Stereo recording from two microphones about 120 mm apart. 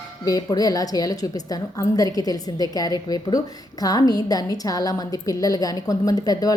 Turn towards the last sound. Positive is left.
turn(degrees=30)  # may be behind; listen again after turning